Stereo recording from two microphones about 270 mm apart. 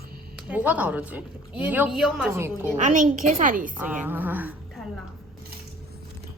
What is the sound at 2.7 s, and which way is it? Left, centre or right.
A woman's voice, right.